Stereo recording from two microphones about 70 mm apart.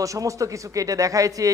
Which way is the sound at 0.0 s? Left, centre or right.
Right.